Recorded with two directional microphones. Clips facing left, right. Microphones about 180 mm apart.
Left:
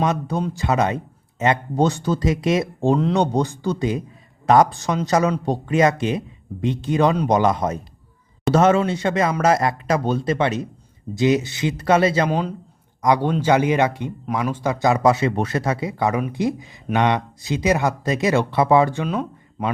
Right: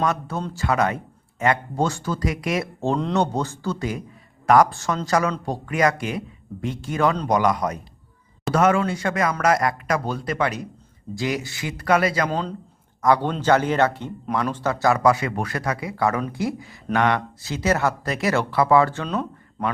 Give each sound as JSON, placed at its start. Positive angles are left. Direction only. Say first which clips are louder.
{"t": 0.0, "sound": "speech", "louder": "left 3 dB", "side_deg": 20}
{"t": 12.3, "sound": "speech", "louder": "left 3 dB", "side_deg": 10}